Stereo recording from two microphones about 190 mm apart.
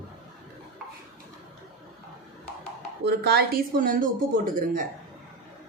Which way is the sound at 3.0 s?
60° right (ahead or behind).